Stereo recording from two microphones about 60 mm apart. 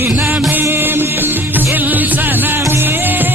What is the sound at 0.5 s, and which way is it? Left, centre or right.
Music, right.